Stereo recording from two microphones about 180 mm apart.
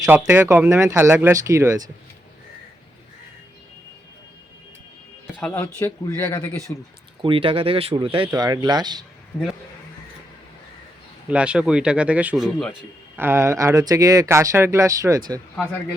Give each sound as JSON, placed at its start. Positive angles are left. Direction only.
{"t": 0.0, "sound": "speech", "side_deg": -15}
{"t": 5.4, "sound": "speech", "side_deg": 10}
{"t": 7.2, "sound": "speech", "side_deg": -30}
{"t": 11.3, "sound": "speech", "side_deg": -5}
{"t": 13.1, "sound": "speech", "side_deg": -10}